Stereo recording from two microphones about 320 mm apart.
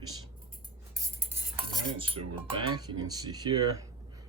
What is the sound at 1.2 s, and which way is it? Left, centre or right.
Cutlery, centre.